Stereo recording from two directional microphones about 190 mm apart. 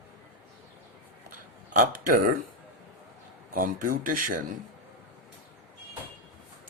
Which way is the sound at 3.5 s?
45° right (ahead or behind).